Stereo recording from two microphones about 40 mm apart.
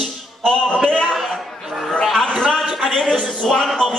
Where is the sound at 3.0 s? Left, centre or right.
Centre.